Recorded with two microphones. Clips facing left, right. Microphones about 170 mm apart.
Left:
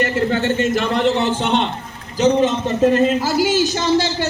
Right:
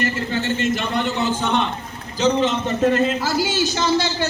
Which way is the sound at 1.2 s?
75° left (ahead or behind).